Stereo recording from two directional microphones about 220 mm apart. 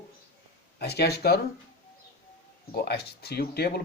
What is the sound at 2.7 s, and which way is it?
Speech, 45° left (ahead or behind).